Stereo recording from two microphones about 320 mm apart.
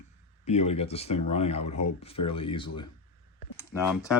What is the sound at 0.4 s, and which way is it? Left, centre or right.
Speech, centre.